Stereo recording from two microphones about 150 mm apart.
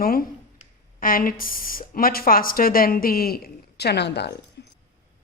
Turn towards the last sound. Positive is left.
turn(degrees=90)